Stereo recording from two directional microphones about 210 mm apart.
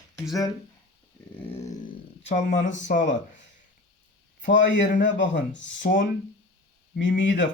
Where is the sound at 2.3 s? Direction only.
35° left (ahead or behind).